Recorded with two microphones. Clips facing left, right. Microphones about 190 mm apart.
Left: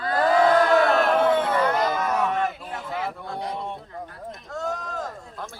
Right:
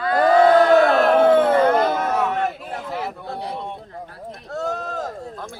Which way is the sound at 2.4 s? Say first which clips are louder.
Right 2 dB; 40° right (ahead or behind).